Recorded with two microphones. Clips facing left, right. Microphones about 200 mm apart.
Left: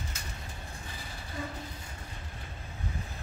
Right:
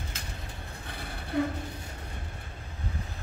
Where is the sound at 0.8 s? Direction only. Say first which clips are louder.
Right 4 dB; 60° right (ahead or behind).